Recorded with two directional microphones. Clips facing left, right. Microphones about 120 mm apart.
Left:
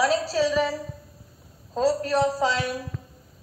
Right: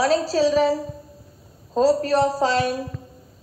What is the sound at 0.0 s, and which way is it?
A woman's voice, 30° right (ahead or behind).